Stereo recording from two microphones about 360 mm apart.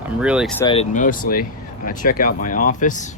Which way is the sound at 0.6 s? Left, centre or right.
Centre.